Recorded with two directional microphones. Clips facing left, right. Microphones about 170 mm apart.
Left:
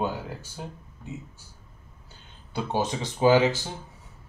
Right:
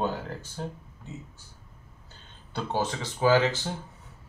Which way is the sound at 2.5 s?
15° left (ahead or behind).